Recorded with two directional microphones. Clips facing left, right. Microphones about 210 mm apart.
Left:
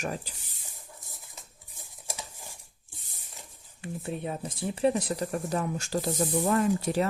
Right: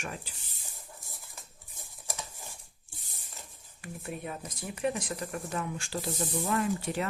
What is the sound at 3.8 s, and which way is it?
Speech, 25° left (ahead or behind).